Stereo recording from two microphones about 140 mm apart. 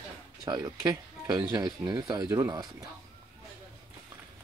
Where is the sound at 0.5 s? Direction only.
30° right (ahead or behind).